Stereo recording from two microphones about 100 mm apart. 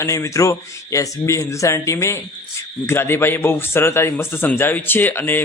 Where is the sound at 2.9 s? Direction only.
25° left (ahead or behind).